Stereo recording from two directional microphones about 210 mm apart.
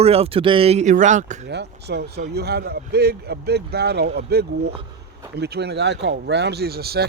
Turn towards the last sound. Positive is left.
turn(degrees=-50)  # may be behind; listen again after turning